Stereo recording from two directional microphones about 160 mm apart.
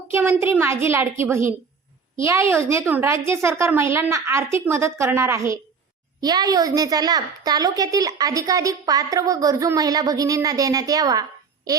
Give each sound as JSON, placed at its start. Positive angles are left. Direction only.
{"t": 0.1, "sound": "a woman's voice", "side_deg": -15}